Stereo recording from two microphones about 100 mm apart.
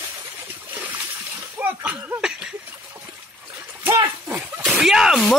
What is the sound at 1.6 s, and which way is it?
Speech, 20° right (ahead or behind).